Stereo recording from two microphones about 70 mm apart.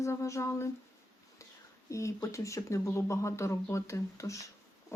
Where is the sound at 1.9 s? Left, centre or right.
Left.